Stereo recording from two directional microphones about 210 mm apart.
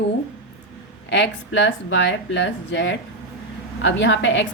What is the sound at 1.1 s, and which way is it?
Speech, 60° left (ahead or behind).